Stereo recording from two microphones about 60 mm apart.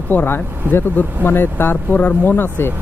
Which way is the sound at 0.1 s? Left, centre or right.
Left.